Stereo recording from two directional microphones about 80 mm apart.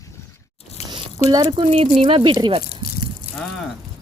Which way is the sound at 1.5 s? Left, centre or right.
Right.